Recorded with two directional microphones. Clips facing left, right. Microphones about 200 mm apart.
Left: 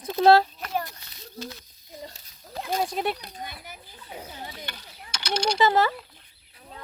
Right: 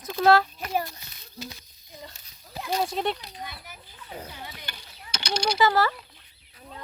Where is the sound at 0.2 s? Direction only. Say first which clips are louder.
Left 2 dB; 30° left (ahead or behind).